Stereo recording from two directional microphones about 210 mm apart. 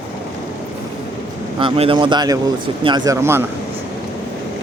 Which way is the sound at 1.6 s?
25° right (ahead or behind).